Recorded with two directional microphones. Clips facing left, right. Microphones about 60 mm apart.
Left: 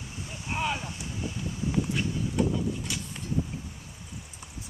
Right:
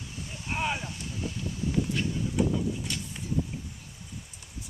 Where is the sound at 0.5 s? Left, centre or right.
Centre.